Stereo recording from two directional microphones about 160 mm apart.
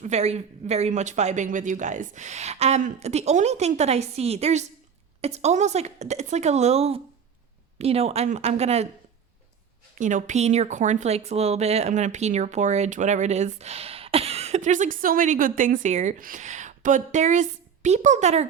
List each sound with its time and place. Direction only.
0.0 s speech: 45° right (ahead or behind)
10.0 s speech: 50° right (ahead or behind)